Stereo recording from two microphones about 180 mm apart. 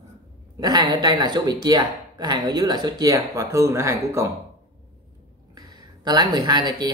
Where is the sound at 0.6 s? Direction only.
20° right (ahead or behind).